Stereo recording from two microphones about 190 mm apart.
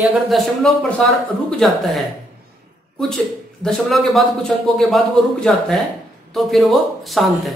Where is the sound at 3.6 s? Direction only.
Centre (ahead or behind).